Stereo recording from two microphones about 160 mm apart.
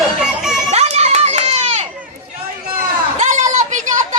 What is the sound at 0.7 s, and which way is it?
Children playing, 40° right (ahead or behind).